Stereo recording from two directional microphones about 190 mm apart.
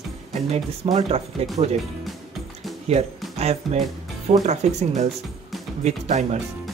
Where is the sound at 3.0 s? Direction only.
30° right (ahead or behind).